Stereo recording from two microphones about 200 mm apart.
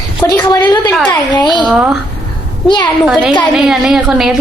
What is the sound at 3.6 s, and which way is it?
Speech, centre (ahead or behind).